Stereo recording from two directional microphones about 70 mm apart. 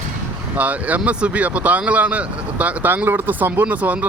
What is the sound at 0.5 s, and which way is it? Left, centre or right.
Speech, right.